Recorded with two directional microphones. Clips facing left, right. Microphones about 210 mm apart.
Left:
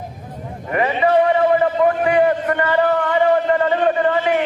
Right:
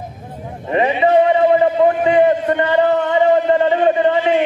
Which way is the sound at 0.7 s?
20° right (ahead or behind).